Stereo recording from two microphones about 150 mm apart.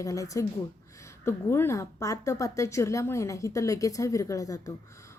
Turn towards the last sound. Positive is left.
turn(degrees=20)  # may be behind; listen again after turning